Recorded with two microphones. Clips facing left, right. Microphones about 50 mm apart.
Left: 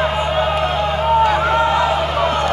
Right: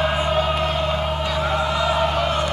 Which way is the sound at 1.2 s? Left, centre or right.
Left.